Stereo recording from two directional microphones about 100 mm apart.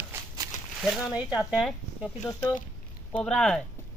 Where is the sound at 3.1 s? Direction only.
10° left (ahead or behind).